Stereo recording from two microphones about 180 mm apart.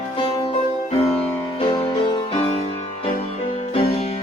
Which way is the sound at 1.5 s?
30° left (ahead or behind).